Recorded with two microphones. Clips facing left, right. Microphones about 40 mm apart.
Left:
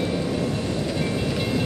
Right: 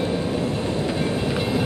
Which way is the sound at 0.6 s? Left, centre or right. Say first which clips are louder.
Right 2 dB; right.